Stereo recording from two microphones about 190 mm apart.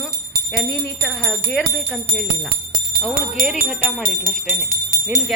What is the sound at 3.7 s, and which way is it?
Jingle bell, centre (ahead or behind).